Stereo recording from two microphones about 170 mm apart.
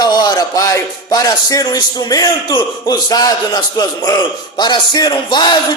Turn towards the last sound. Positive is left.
turn(degrees=25)  # may be behind; listen again after turning